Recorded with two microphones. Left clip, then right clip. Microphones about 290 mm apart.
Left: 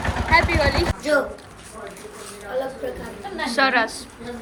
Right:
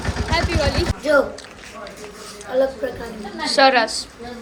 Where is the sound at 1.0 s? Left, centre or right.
Right.